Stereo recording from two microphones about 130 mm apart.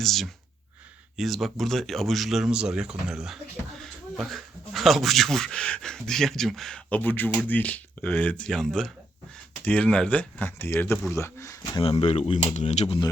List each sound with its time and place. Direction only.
0.0 s speech: centre (ahead or behind); by 11.8 s 20° left (ahead or behind)
11.8 s speech: 50° left (ahead or behind)
12.5 s speech: 60° left (ahead or behind)